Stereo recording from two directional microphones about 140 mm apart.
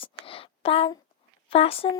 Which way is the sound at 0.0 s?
40° left (ahead or behind).